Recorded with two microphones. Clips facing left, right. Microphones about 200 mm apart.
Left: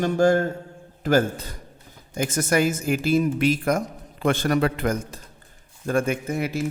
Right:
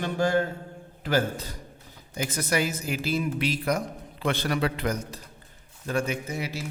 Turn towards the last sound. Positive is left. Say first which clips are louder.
# left 7 dB
turn(degrees=50)  # may be behind; listen again after turning